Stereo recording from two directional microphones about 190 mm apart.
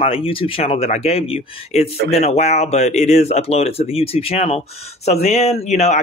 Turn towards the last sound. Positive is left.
turn(degrees=35)  # may be behind; listen again after turning